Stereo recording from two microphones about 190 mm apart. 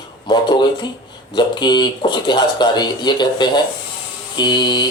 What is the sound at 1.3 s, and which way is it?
Speech, 25° left (ahead or behind).